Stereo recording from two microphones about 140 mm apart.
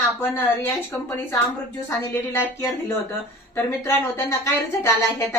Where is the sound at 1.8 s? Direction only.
15° left (ahead or behind).